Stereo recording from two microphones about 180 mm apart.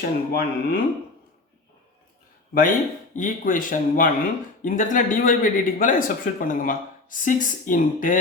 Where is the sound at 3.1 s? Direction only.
45° left (ahead or behind).